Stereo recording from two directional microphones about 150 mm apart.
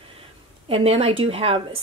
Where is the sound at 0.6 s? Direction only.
40° right (ahead or behind).